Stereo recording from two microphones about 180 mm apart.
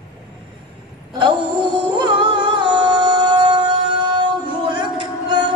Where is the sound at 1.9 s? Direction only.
25° right (ahead or behind).